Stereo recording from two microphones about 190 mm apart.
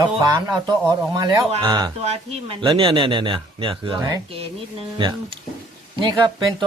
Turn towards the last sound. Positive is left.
turn(degrees=-25)  # may be behind; listen again after turning